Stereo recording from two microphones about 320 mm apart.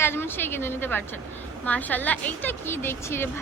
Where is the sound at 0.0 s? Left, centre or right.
Centre.